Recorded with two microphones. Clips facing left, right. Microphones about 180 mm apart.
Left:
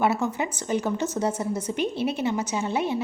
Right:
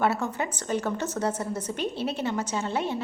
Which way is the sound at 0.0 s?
10° left (ahead or behind).